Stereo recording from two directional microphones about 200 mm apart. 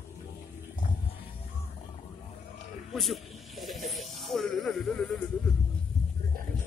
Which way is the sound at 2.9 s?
Centre (ahead or behind).